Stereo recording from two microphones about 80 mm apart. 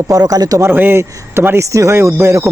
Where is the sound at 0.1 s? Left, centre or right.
Right.